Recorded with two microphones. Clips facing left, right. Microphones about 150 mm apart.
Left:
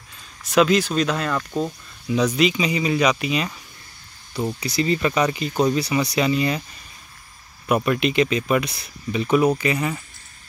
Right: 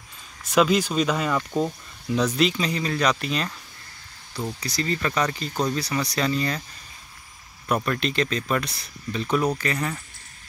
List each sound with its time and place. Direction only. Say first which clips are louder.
0.6 s speech: left 2 dB; 5° right (ahead or behind)
4.7 s speech: left 5 dB; 15° left (ahead or behind)
7.6 s speech: left 5 dB; 10° left (ahead or behind)